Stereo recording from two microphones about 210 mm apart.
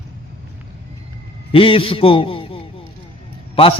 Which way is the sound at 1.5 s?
25° left (ahead or behind).